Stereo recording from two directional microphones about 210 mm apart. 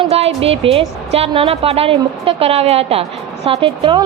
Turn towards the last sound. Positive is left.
turn(degrees=-25)  # may be behind; listen again after turning